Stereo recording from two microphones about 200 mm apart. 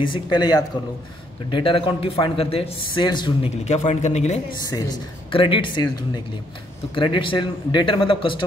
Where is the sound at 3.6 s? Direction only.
35° left (ahead or behind).